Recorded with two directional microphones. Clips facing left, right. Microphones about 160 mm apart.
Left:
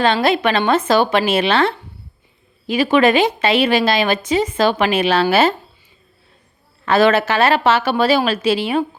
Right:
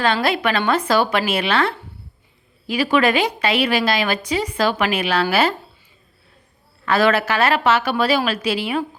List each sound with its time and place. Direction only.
0.0 s a woman's voice: 25° left (ahead or behind)
6.8 s a woman's voice: 25° left (ahead or behind)